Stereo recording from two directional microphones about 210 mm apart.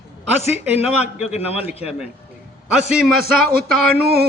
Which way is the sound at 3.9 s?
50° right (ahead or behind).